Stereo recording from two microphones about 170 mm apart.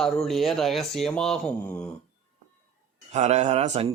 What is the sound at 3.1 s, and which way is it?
Speech, 40° right (ahead or behind).